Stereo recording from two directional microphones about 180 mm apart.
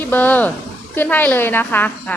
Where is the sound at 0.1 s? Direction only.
10° left (ahead or behind).